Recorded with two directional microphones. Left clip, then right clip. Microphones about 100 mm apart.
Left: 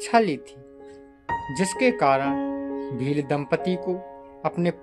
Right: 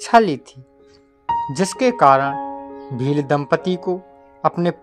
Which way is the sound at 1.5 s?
45° right (ahead or behind).